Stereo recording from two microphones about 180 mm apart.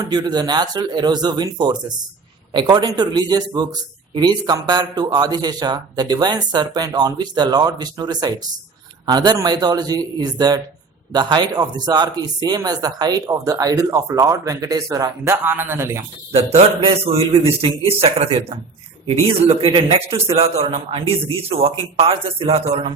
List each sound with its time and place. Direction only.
0.1 s a man's voice: 25° right (ahead or behind)
16.3 s a man's voice: 35° right (ahead or behind)
19.6 s a man's voice: 30° right (ahead or behind)